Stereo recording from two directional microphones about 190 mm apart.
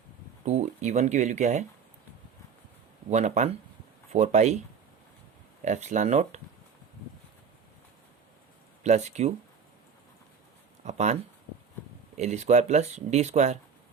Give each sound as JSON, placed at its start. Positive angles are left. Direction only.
{"t": 0.4, "sound": "speech", "side_deg": -35}
{"t": 3.1, "sound": "speech", "side_deg": -35}
{"t": 5.6, "sound": "speech", "side_deg": -40}
{"t": 8.8, "sound": "speech", "side_deg": -35}
{"t": 10.8, "sound": "speech", "side_deg": -35}